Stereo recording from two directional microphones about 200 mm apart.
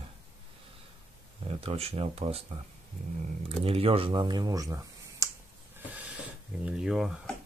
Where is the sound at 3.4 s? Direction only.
30° right (ahead or behind).